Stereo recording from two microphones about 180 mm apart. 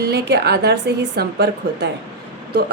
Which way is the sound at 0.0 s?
65° right (ahead or behind).